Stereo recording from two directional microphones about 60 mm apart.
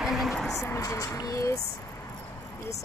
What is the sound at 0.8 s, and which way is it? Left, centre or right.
Speech, left.